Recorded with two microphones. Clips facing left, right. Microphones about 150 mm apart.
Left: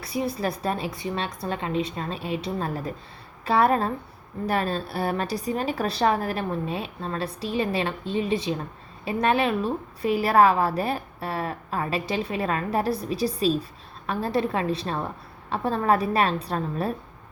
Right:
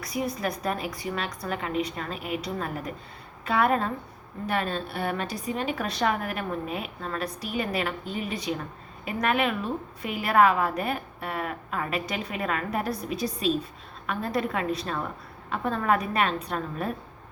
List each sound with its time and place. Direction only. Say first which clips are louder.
0.0 s a woman's voice: left 2 dB; 30° left (ahead or behind)